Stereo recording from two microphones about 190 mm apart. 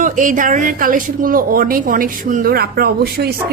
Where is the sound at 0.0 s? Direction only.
45° right (ahead or behind).